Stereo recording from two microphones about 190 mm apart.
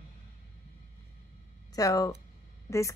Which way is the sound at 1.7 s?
20° left (ahead or behind).